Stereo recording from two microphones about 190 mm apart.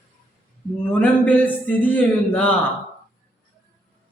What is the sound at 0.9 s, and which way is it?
A man's voice, 5° left (ahead or behind).